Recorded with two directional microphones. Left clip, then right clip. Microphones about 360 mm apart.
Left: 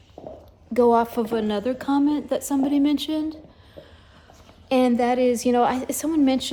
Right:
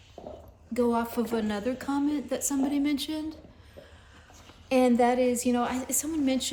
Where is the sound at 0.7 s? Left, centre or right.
Centre.